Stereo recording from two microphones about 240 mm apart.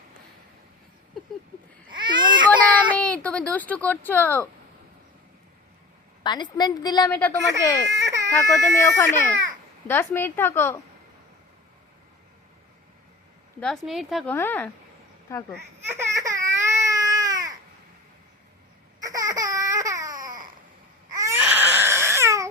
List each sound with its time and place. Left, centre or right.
1.9 s baby cry: centre
2.9 s a sound: centre
6.2 s a woman's voice: centre
13.6 s a woman's voice: centre
15.9 s baby cry: centre
19.0 s baby cry: centre